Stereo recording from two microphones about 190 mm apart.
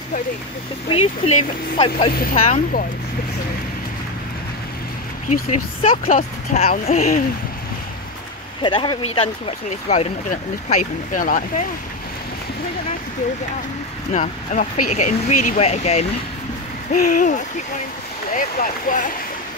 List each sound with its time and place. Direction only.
0.8 s speech: 30° left (ahead or behind)
6.0 s speech: 40° left (ahead or behind)
8.6 s speech: 25° left (ahead or behind)
9.7 s speech: 40° left (ahead or behind)
14.1 s speech: 40° left (ahead or behind)